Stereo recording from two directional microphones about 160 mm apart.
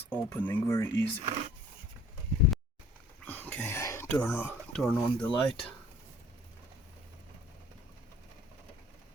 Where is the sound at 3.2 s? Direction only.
10° left (ahead or behind).